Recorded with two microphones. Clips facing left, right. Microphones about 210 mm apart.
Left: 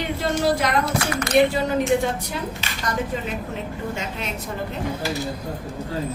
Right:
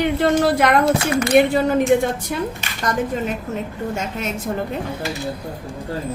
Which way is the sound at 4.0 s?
45° right (ahead or behind).